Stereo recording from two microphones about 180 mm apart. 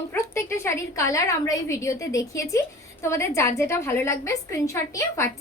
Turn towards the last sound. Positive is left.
turn(degrees=15)  # may be behind; listen again after turning